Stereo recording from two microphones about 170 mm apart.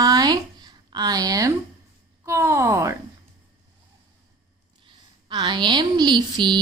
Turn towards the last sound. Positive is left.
turn(degrees=-25)  # may be behind; listen again after turning